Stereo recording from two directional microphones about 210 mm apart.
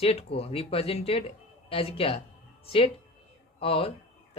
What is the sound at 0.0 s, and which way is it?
Speech, 30° left (ahead or behind).